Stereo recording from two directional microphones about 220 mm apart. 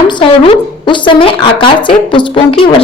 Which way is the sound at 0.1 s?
25° left (ahead or behind).